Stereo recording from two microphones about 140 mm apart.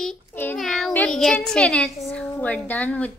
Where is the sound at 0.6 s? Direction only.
Centre (ahead or behind).